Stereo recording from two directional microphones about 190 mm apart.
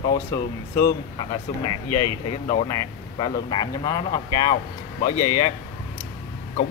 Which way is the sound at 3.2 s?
25° left (ahead or behind).